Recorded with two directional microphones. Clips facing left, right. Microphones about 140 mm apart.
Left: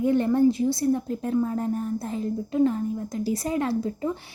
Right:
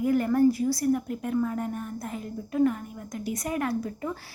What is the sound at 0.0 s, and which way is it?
A woman's voice, 25° left (ahead or behind).